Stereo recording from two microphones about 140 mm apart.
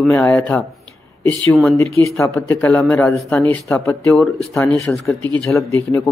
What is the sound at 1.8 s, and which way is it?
Speech, 20° left (ahead or behind).